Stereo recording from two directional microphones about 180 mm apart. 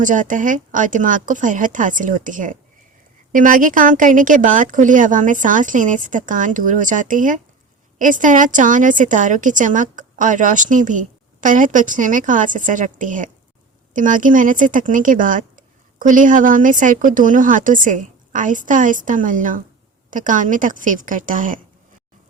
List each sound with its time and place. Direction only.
0.0 s a woman's voice: 45° right (ahead or behind)